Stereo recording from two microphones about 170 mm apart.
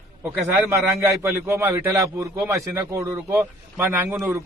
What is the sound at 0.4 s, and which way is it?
A man's voice, 10° right (ahead or behind).